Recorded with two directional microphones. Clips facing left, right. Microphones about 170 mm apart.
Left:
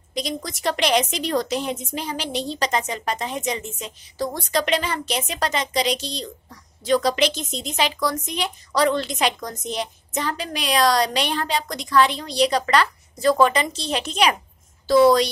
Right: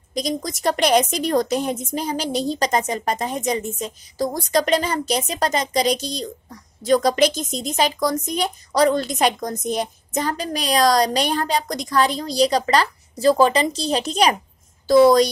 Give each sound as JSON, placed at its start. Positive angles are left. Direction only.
{"t": 0.1, "sound": "a woman's voice", "side_deg": -40}